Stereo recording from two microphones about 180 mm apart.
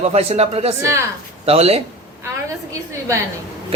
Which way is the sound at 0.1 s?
35° right (ahead or behind).